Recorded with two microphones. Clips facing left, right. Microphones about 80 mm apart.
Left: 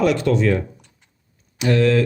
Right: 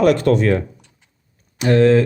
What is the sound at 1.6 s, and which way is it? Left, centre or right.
Speech, right.